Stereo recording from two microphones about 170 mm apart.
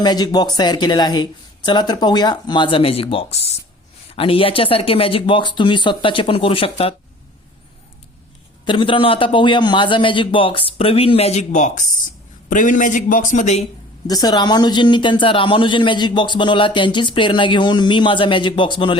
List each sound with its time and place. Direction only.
0.0 s a man's voice: 25° left (ahead or behind)
8.6 s a man's voice: 30° left (ahead or behind)
14.1 s a man's voice: 25° left (ahead or behind)